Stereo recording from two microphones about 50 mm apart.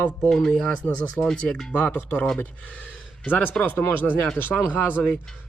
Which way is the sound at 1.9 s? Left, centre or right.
Left.